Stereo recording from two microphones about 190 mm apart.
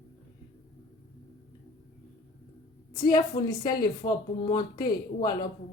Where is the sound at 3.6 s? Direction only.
20° left (ahead or behind).